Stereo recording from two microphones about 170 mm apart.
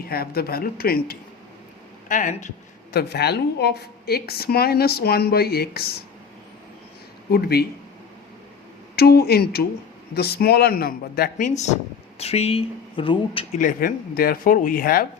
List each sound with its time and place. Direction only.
0.0 s speech: 65° left (ahead or behind)
2.0 s speech: 50° left (ahead or behind)
2.9 s a woman's voice: 70° left (ahead or behind)
7.3 s a woman's voice: 65° left (ahead or behind)
9.0 s a woman's voice: 65° left (ahead or behind)
11.3 s speech: 45° left (ahead or behind)
13.6 s speech: 55° left (ahead or behind)